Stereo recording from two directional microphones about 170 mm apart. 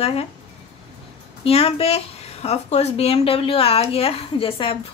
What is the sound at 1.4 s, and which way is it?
Speech, 35° left (ahead or behind).